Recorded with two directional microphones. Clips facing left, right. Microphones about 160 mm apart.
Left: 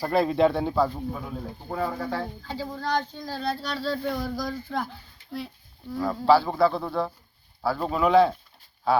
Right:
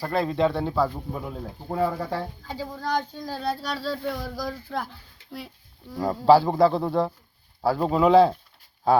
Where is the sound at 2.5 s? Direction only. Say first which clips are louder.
Even; 10° right (ahead or behind).